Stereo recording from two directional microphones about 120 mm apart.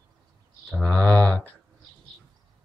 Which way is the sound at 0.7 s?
10° left (ahead or behind).